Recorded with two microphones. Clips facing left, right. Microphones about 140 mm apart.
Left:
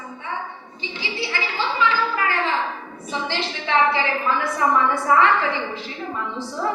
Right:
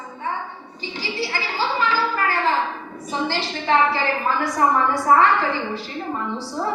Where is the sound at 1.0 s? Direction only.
40° right (ahead or behind).